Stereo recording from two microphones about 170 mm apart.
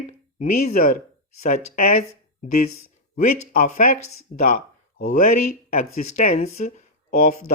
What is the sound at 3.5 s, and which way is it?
Speech, 50° left (ahead or behind).